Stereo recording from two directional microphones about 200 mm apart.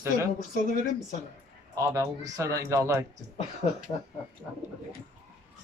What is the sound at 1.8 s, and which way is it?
Speech, 15° right (ahead or behind).